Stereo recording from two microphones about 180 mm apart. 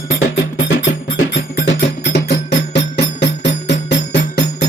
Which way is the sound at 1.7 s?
75° left (ahead or behind).